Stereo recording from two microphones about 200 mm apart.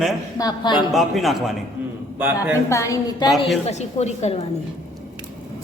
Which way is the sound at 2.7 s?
15° left (ahead or behind).